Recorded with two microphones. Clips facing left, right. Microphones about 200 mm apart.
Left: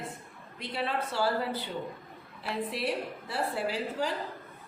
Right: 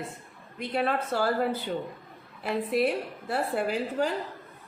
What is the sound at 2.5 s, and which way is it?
Speech, 50° right (ahead or behind).